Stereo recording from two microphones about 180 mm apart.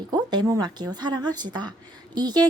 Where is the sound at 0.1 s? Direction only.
25° right (ahead or behind).